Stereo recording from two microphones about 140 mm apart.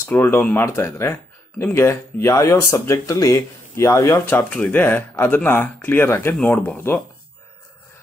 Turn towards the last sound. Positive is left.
turn(degrees=15)  # may be behind; listen again after turning